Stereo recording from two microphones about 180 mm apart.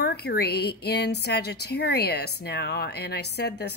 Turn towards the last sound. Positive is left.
turn(degrees=65)  # may be behind; listen again after turning